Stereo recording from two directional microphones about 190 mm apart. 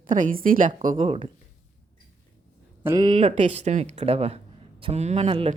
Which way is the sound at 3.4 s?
40° right (ahead or behind).